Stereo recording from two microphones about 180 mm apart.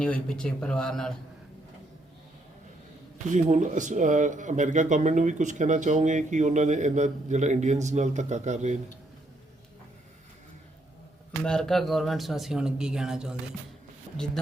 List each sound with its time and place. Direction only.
0.0 s speech: 5° left (ahead or behind)
3.2 s speech: 45° right (ahead or behind)
11.4 s speech: 5° left (ahead or behind)